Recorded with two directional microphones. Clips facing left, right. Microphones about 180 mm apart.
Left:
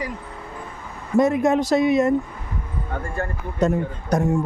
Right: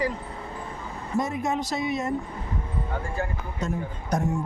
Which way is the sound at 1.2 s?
65° left (ahead or behind).